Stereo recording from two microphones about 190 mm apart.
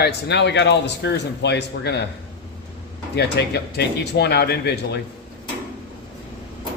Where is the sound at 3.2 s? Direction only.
60° left (ahead or behind).